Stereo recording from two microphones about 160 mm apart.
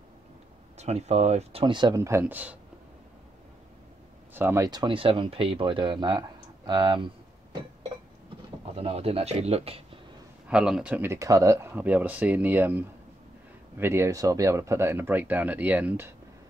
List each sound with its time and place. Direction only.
0.7 s speech: 40° right (ahead or behind)
2.0 s speech: 15° right (ahead or behind)
4.3 s speech: 15° right (ahead or behind)
4.6 s speech: 30° right (ahead or behind)
8.7 s speech: 40° right (ahead or behind)
10.5 s speech: 5° right (ahead or behind)